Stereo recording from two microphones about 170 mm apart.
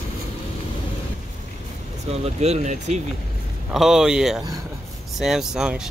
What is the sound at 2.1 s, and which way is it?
Speech, 40° right (ahead or behind).